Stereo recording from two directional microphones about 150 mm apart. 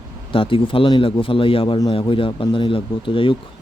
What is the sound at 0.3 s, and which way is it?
Speech, 35° left (ahead or behind).